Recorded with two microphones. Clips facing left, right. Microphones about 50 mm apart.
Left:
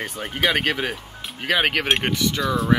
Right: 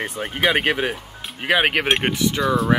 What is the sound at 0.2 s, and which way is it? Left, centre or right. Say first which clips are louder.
Speech: right 2 dB; centre.